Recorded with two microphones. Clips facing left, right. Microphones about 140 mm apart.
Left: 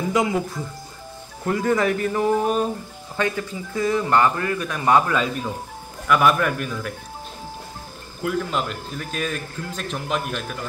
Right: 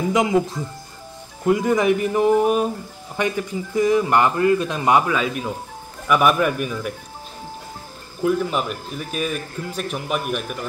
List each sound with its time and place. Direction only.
0.1 s speech: 20° right (ahead or behind)
1.4 s speech: 15° right (ahead or behind)
5.1 s speech: 5° right (ahead or behind)
8.3 s speech: 10° right (ahead or behind)